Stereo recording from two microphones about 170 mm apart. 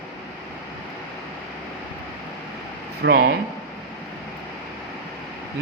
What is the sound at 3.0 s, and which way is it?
Speech, 60° right (ahead or behind).